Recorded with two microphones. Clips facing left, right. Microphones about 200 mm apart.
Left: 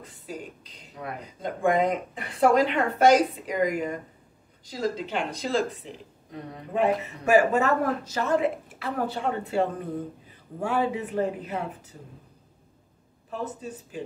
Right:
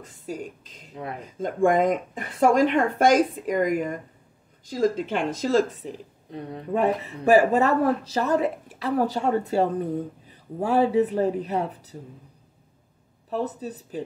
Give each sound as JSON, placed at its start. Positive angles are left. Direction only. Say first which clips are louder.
{"t": 1.2, "sound": "speech", "louder": "right 4 dB", "side_deg": -45}
{"t": 13.3, "sound": "speech", "louder": "right 5 dB", "side_deg": -35}